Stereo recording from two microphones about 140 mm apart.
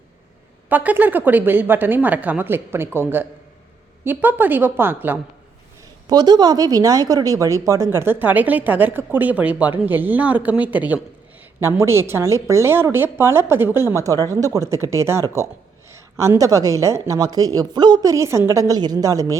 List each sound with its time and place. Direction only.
0.7 s a woman's voice: 10° right (ahead or behind)
6.1 s a woman's voice: 30° right (ahead or behind)